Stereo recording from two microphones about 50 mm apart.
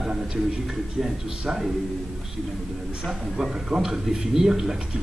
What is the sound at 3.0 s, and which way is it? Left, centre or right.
A man's voice, centre.